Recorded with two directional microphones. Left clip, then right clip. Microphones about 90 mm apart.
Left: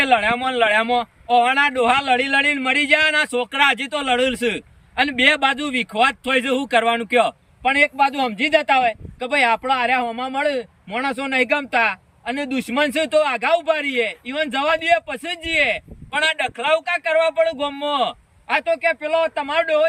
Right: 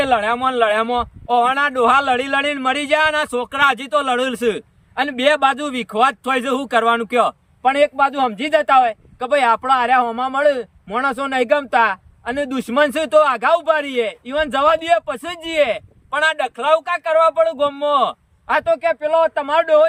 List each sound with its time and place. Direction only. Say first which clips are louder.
0.0 s a man's voice: right 1 dB; 20° right (ahead or behind)